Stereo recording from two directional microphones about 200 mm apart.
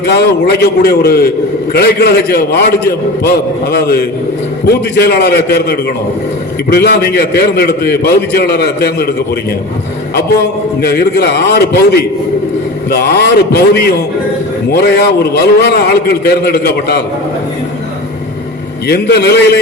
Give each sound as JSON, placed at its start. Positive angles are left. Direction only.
{"t": 0.0, "sound": "a man's voice", "side_deg": 55}
{"t": 10.8, "sound": "a man's voice", "side_deg": 50}
{"t": 18.9, "sound": "a man's voice", "side_deg": 55}